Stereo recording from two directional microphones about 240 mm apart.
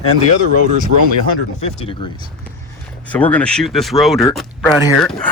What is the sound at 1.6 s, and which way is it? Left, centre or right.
Speech, left.